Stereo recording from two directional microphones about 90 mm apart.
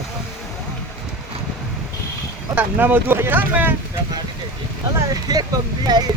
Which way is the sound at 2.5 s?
20° right (ahead or behind).